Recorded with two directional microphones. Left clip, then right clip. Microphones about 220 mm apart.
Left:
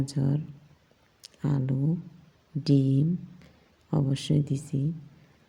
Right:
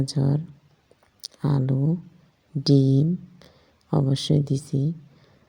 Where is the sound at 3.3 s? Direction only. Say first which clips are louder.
Right 4 dB; 10° right (ahead or behind).